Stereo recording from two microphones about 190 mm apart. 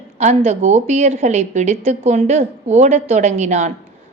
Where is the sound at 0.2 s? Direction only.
35° right (ahead or behind).